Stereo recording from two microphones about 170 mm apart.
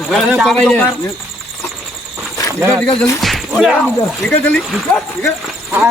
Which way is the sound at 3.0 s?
Centre (ahead or behind).